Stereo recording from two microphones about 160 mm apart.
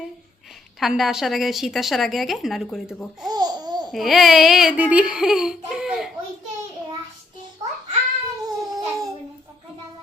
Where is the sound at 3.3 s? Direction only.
25° right (ahead or behind).